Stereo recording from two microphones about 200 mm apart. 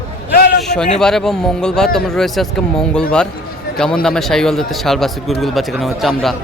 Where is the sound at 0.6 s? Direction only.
5° left (ahead or behind).